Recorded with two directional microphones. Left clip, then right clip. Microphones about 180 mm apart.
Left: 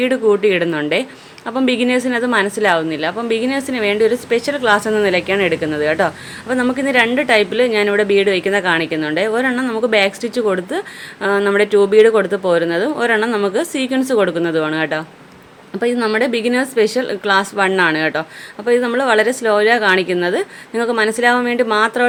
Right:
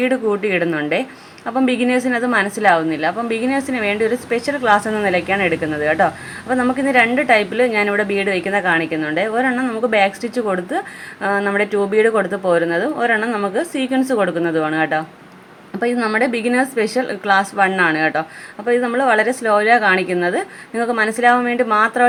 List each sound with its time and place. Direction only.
0.0 s a woman's voice: 20° left (ahead or behind)